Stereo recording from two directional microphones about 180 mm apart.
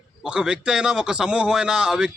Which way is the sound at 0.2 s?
5° right (ahead or behind).